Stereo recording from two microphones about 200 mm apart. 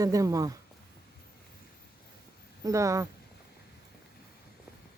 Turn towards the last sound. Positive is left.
turn(degrees=-15)  # may be behind; listen again after turning